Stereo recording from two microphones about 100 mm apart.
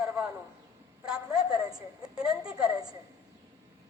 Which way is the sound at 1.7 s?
35° right (ahead or behind).